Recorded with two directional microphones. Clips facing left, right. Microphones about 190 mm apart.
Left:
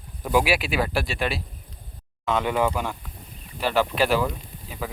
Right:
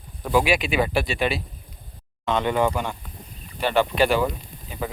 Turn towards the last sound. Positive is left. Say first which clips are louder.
# right 2 dB
turn(degrees=0)  # may be behind; listen again after turning